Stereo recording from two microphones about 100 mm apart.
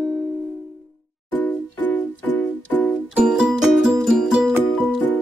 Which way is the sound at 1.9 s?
15° left (ahead or behind).